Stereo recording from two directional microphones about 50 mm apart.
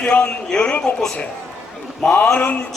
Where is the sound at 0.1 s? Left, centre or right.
Centre.